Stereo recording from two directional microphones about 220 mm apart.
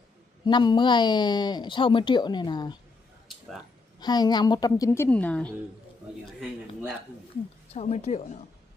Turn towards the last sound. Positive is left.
turn(degrees=30)  # may be behind; listen again after turning